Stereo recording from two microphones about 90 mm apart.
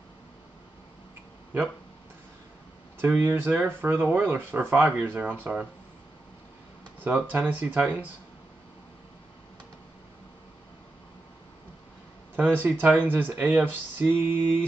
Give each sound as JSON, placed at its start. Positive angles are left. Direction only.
{"t": 3.0, "sound": "speech", "side_deg": -20}
{"t": 7.2, "sound": "speech", "side_deg": -20}
{"t": 12.4, "sound": "speech", "side_deg": -20}